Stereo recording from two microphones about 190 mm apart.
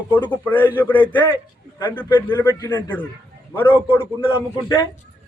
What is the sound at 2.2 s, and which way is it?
Speech, 10° left (ahead or behind).